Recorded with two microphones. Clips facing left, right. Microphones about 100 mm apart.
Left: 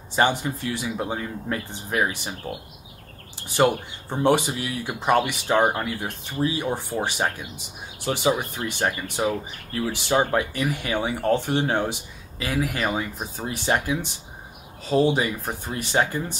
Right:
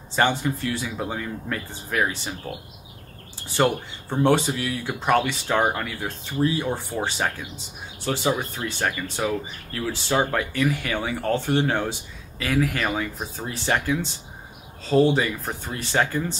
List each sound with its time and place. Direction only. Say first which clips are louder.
0.1 s speech: even; 15° left (ahead or behind)